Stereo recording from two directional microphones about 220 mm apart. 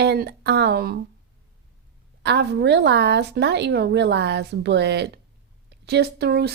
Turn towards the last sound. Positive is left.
turn(degrees=-45)  # may be behind; listen again after turning